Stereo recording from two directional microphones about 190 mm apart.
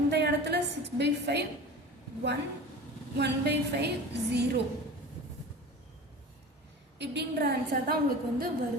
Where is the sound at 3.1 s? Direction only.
60° right (ahead or behind).